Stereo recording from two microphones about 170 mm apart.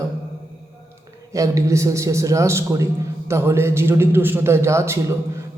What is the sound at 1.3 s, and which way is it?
A man's voice, 20° right (ahead or behind).